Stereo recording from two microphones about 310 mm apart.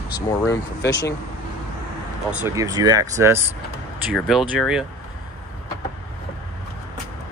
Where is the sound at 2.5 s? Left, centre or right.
Centre.